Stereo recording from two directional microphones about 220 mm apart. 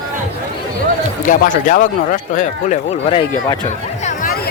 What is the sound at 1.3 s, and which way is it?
A man's voice, 35° left (ahead or behind).